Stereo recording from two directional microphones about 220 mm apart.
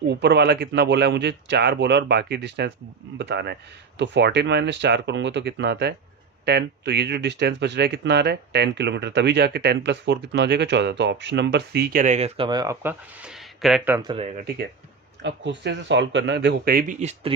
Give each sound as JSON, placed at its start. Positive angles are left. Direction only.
{"t": 0.1, "sound": "speech", "side_deg": -50}
{"t": 15.2, "sound": "speech", "side_deg": -50}